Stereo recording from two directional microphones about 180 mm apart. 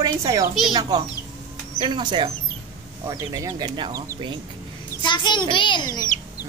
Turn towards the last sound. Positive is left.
turn(degrees=20)  # may be behind; listen again after turning